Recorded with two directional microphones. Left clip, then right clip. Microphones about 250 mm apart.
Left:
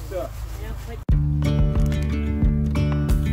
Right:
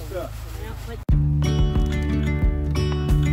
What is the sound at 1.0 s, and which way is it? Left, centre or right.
Music, centre.